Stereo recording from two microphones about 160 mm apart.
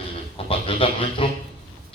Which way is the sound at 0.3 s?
35° left (ahead or behind).